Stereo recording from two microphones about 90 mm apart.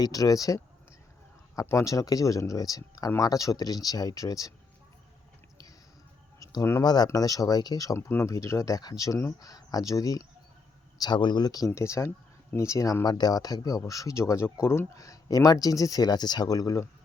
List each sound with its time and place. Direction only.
0.0 s speech: 45° left (ahead or behind)
6.4 s a sound: 40° left (ahead or behind)
6.8 s speech: 50° left (ahead or behind)
7.9 s speech: 30° left (ahead or behind)
11.0 s speech: 55° left (ahead or behind); by 16.9 s 40° left (ahead or behind)